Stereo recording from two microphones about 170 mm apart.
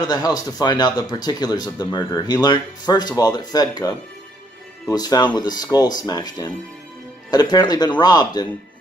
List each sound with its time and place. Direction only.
0.0 s speech: 25° left (ahead or behind)